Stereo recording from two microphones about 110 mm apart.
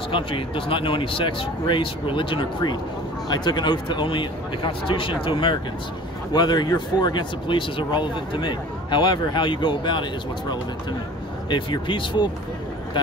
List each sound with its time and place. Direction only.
0.1 s speech: 55° left (ahead or behind)
11.4 s speech: 45° left (ahead or behind)